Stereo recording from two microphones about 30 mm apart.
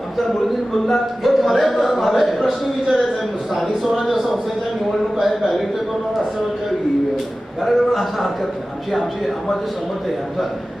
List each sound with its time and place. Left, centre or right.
0.9 s speech: centre
7.6 s speech: centre